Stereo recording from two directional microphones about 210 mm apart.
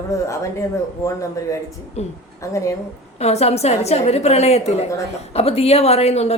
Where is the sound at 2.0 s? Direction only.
30° left (ahead or behind).